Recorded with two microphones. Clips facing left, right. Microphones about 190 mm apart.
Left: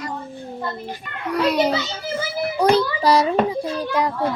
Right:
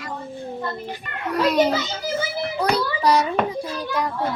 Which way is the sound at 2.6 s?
25° left (ahead or behind).